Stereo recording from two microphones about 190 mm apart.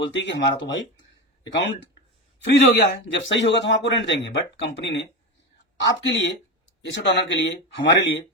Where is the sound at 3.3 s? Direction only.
70° left (ahead or behind).